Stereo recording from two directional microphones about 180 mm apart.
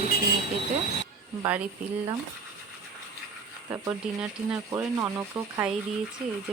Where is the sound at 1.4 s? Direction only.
10° right (ahead or behind).